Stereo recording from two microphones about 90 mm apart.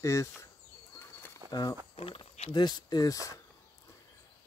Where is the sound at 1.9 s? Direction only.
90° left.